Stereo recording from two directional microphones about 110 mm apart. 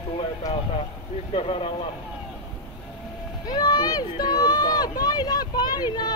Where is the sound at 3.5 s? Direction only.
40° left (ahead or behind).